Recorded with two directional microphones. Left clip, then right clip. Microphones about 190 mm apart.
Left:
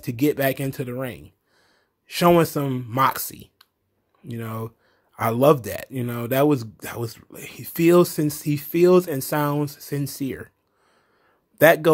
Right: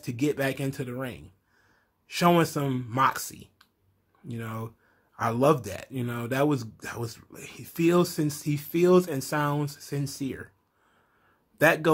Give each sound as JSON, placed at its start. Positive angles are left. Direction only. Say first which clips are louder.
{"t": 0.0, "sound": "a man's voice", "louder": "left 6 dB", "side_deg": 40}
{"t": 11.5, "sound": "a man's voice", "louder": "left 7 dB", "side_deg": 35}